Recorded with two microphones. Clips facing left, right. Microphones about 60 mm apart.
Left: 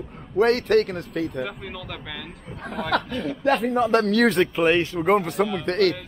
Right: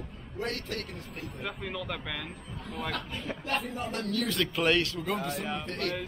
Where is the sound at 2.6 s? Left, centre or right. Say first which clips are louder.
Left 11 dB; left.